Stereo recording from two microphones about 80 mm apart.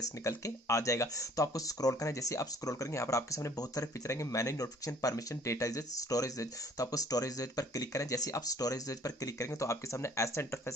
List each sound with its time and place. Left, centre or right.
0.3 s speech: left